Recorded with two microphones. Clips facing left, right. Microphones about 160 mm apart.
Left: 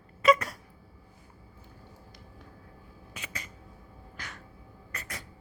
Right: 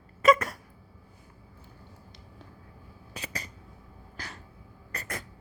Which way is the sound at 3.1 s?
35° right (ahead or behind).